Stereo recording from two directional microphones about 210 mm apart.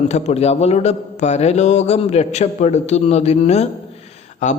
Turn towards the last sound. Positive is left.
turn(degrees=35)  # may be behind; listen again after turning